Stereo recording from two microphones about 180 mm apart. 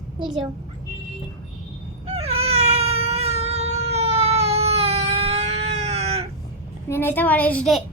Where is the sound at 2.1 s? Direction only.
35° right (ahead or behind).